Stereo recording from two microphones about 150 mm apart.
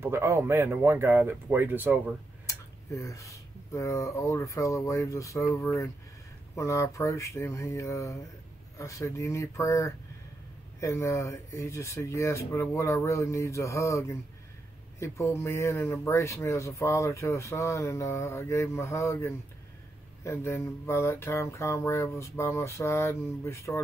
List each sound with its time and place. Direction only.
0.0 s speech: 15° right (ahead or behind)
2.4 s speech: 20° left (ahead or behind)